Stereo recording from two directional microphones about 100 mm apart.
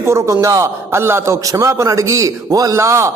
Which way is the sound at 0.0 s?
30° right (ahead or behind).